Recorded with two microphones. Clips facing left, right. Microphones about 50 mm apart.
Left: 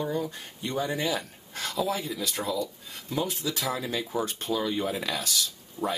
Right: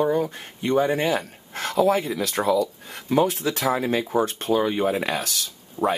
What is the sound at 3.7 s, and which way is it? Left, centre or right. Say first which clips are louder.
Speech: right 11 dB; right.